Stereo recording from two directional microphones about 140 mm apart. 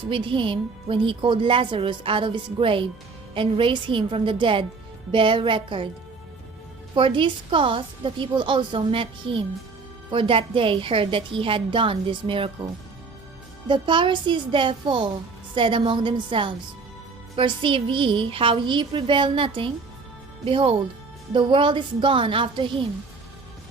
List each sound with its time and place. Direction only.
0.1 s a woman's voice: 35° right (ahead or behind)
6.9 s a woman's voice: 35° right (ahead or behind)